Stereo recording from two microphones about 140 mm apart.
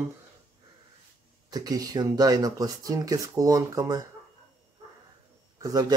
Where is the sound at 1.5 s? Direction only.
25° right (ahead or behind).